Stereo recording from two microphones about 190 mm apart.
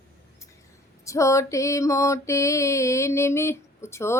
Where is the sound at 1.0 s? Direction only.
15° left (ahead or behind).